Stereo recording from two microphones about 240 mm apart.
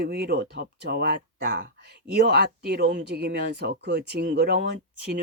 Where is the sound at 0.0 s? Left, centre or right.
Right.